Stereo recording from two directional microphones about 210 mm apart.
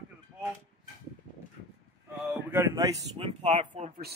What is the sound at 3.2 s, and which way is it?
Speech, 30° right (ahead or behind).